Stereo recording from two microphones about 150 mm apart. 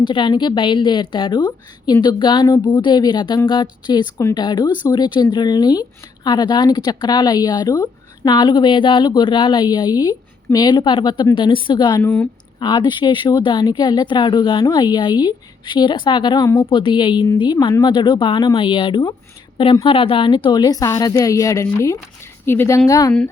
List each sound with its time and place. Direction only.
0.0 s a woman's voice: 30° left (ahead or behind)
12.0 s speech: 15° left (ahead or behind)
12.5 s a woman's voice: 30° left (ahead or behind)
16.5 s speech: 15° left (ahead or behind)
16.7 s a woman's voice: 35° left (ahead or behind)